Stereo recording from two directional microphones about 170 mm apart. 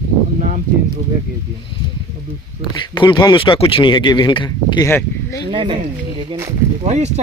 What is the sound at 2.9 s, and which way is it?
Speech, 25° left (ahead or behind).